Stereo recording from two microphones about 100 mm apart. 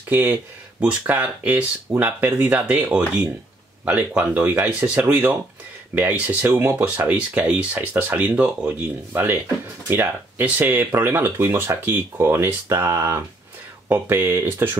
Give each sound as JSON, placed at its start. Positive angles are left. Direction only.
{"t": 0.1, "sound": "speech", "side_deg": -20}